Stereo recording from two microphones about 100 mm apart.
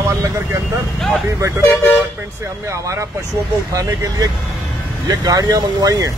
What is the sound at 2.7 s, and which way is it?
Speech, 30° right (ahead or behind).